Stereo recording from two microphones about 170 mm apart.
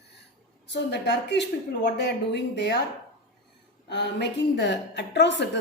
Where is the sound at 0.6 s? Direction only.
90° left.